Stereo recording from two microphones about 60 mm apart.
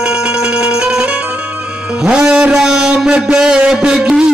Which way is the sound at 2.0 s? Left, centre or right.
Centre.